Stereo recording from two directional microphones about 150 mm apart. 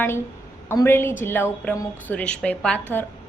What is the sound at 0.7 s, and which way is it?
A woman's voice, 15° left (ahead or behind).